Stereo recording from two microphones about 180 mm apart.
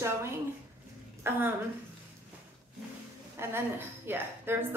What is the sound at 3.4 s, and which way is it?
A woman's voice, 15° right (ahead or behind).